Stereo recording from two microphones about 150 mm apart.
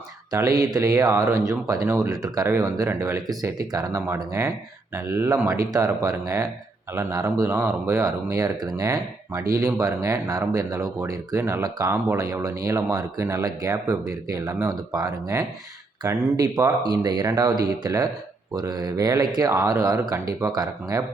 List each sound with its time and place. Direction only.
0.3 s speech: 25° right (ahead or behind)